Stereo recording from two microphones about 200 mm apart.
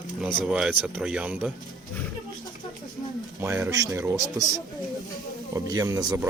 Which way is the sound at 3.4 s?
15° right (ahead or behind).